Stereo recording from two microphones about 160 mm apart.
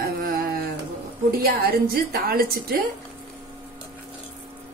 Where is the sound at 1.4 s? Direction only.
70° right (ahead or behind).